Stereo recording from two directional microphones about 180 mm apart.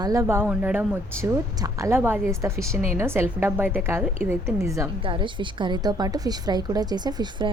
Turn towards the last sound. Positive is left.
turn(degrees=-25)  # may be behind; listen again after turning